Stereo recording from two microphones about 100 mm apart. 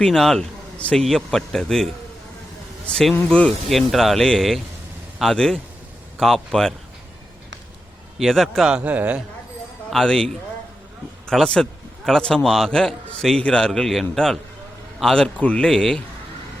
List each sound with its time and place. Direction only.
0.0 s a man's voice: 5° left (ahead or behind)
3.7 s a man's voice: centre (ahead or behind)
8.2 s a man's voice: centre (ahead or behind)
8.7 s a man's voice: 15° right (ahead or behind)
9.9 s a man's voice: 5° left (ahead or behind)